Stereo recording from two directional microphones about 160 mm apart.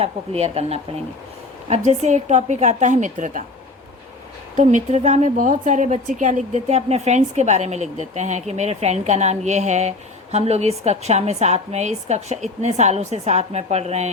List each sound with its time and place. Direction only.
0.0 s a woman's voice: 40° right (ahead or behind)
4.5 s a woman's voice: 50° right (ahead or behind)